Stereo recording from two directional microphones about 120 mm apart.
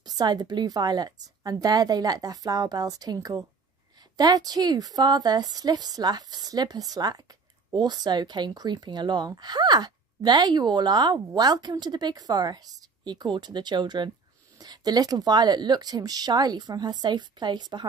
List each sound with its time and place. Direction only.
0.0 s speech: 35° right (ahead or behind)